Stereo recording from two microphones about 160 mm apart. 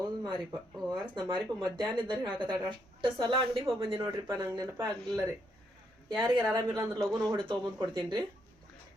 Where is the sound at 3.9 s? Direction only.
20° right (ahead or behind).